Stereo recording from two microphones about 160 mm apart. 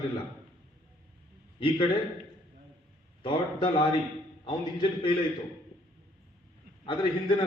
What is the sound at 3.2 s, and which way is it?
Speech, 30° left (ahead or behind).